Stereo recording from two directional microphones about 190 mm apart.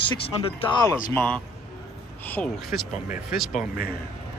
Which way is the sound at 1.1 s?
10° left (ahead or behind).